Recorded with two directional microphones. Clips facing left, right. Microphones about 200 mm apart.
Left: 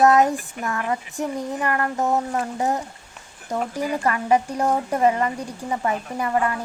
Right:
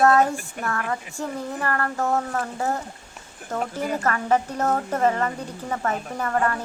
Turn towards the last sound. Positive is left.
turn(degrees=10)  # may be behind; listen again after turning